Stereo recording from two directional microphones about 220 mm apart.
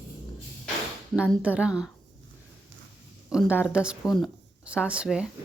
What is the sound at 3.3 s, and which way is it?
Speech, 5° right (ahead or behind).